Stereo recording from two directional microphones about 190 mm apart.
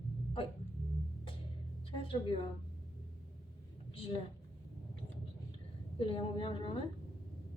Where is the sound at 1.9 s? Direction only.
30° left (ahead or behind).